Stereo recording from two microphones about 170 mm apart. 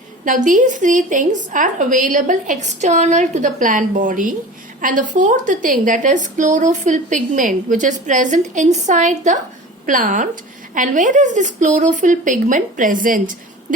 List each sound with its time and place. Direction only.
0.3 s a woman's voice: 50° right (ahead or behind)